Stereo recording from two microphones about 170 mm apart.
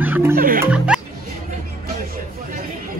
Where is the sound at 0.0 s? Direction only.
10° right (ahead or behind).